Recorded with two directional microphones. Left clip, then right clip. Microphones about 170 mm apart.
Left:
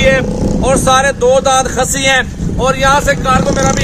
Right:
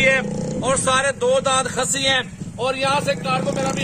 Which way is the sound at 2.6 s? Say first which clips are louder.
Left 9 dB; centre (ahead or behind).